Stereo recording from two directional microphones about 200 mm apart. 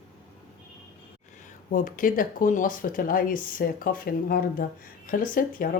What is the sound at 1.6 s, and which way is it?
Speech, 45° left (ahead or behind).